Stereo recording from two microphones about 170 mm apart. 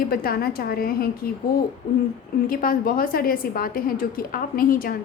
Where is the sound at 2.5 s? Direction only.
60° left (ahead or behind).